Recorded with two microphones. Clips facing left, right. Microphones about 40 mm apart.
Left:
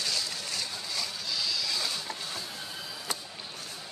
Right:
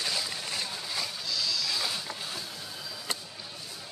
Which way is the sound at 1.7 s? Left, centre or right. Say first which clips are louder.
Right 1 dB; centre.